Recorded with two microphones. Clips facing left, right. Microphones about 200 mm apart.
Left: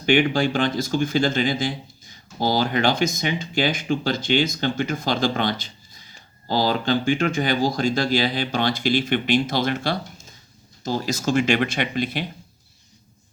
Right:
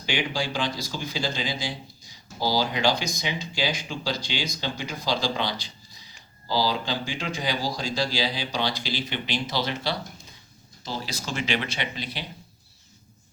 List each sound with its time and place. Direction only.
0.0 s speech: 55° left (ahead or behind)